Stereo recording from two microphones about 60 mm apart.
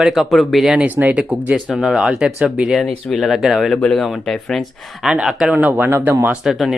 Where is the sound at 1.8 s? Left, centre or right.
Centre.